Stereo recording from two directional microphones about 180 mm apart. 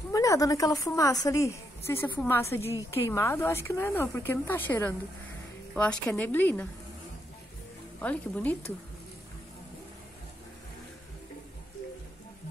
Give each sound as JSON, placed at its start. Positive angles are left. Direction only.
{"t": 0.1, "sound": "a woman's voice", "side_deg": 20}
{"t": 8.0, "sound": "speech", "side_deg": 10}